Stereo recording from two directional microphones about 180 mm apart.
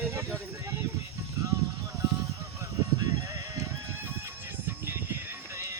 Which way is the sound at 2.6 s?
20° right (ahead or behind).